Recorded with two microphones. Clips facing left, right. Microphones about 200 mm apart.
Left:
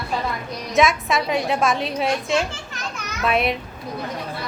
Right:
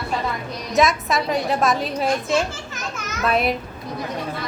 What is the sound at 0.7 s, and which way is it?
A woman's voice, centre (ahead or behind).